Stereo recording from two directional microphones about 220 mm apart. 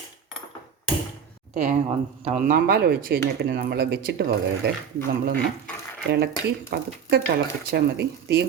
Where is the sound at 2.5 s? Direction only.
45° right (ahead or behind).